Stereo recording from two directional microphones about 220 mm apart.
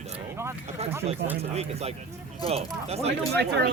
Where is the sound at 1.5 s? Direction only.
30° right (ahead or behind).